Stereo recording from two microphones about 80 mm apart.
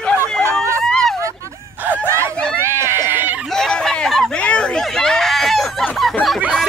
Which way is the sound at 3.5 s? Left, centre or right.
Centre.